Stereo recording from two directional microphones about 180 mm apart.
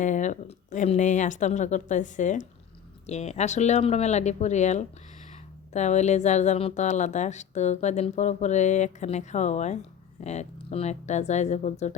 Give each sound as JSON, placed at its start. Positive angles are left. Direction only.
{"t": 0.0, "sound": "a woman's voice", "side_deg": 45}